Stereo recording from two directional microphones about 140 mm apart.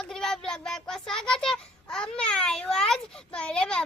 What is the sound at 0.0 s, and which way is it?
Child singing, 5° left (ahead or behind).